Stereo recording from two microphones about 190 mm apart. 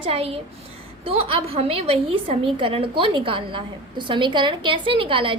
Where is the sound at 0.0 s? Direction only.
30° right (ahead or behind).